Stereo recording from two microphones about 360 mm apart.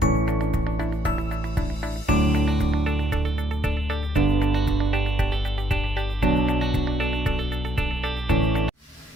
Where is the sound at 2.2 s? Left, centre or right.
Centre.